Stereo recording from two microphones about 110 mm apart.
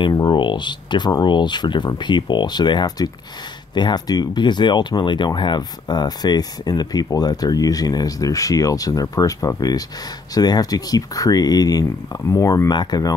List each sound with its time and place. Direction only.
0.0 s speech: 40° left (ahead or behind)